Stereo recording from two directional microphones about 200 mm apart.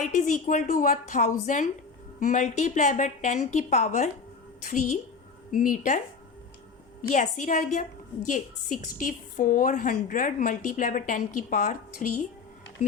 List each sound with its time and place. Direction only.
0.0 s a woman's voice: 40° left (ahead or behind)
7.1 s a woman's voice: 40° left (ahead or behind)